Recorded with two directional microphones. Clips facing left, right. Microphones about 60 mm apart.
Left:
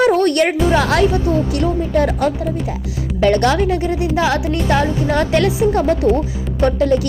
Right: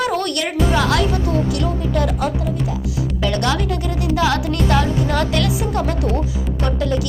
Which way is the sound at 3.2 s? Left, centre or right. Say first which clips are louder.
Left 7 dB; left.